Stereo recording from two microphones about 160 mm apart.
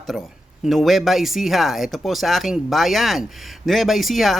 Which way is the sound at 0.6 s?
Centre (ahead or behind).